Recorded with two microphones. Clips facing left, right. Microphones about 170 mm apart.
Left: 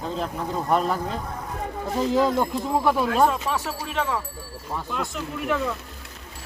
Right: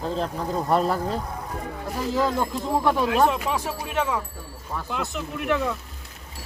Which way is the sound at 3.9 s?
5° right (ahead or behind).